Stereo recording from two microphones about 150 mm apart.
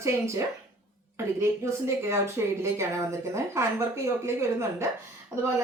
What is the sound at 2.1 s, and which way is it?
A woman's voice, 20° right (ahead or behind).